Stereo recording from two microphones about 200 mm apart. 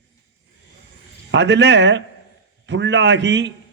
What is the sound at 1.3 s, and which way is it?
A man's voice, 60° right (ahead or behind).